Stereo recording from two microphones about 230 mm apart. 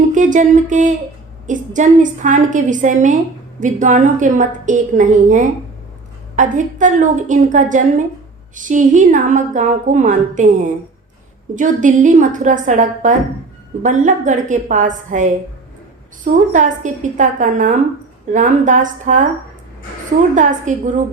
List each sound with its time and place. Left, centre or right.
0.1 s music: right
1.5 s a woman's voice: right
20.3 s a woman's voice: right